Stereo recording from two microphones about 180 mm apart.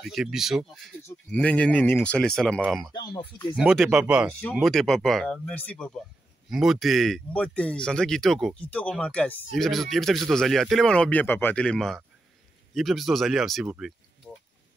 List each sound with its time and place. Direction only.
0.0 s speech: centre (ahead or behind)
2.9 s speech: 25° left (ahead or behind)
3.5 s speech: centre (ahead or behind)
4.4 s speech: 5° left (ahead or behind)